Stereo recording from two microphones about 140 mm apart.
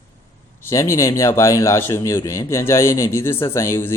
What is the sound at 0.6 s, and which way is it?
Speech, 20° left (ahead or behind).